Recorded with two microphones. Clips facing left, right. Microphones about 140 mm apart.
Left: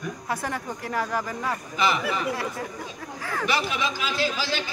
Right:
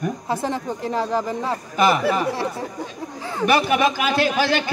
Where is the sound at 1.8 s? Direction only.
50° right (ahead or behind).